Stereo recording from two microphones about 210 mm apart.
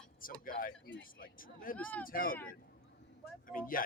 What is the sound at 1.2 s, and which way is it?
Speech, 40° left (ahead or behind).